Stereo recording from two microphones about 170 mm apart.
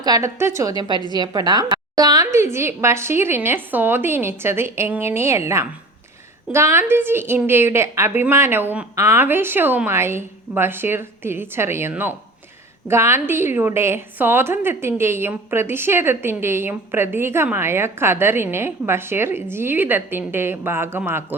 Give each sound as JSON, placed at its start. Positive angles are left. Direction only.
{"t": 0.0, "sound": "a woman's voice", "side_deg": -20}